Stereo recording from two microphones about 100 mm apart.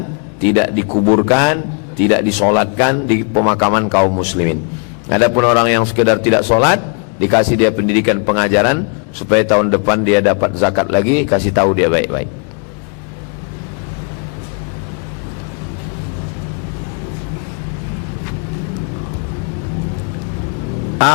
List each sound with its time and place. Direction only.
0.5 s a man's voice: 15° left (ahead or behind)